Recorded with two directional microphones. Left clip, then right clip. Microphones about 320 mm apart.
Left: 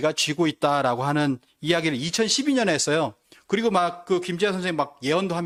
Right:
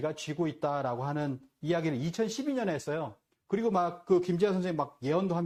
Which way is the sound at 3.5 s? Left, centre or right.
Left.